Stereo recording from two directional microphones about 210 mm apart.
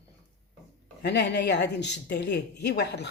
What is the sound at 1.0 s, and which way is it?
Speech, 55° left (ahead or behind).